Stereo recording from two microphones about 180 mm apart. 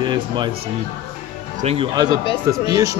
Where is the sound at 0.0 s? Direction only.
25° right (ahead or behind).